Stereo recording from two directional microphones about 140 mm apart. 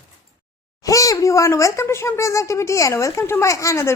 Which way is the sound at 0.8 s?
25° left (ahead or behind).